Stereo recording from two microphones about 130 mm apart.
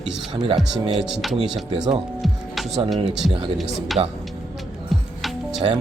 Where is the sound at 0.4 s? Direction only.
45° right (ahead or behind).